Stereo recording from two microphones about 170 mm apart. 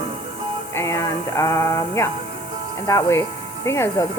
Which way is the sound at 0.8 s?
15° left (ahead or behind).